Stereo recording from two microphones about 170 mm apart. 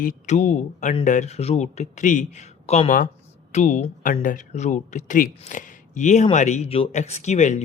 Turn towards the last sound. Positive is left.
turn(degrees=45)  # may be behind; listen again after turning